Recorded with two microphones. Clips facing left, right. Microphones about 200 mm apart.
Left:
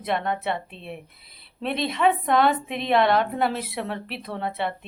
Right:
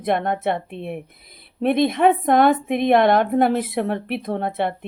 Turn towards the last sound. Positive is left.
turn(degrees=-50)  # may be behind; listen again after turning